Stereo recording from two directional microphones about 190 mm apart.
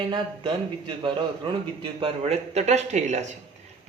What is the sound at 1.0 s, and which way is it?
A man's voice, 25° right (ahead or behind).